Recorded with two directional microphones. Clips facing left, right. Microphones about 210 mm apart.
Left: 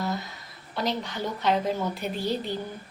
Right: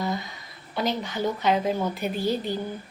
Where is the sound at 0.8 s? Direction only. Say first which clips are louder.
Right 3 dB; centre (ahead or behind).